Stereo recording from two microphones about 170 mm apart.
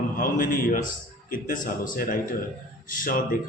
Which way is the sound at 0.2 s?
55° left (ahead or behind).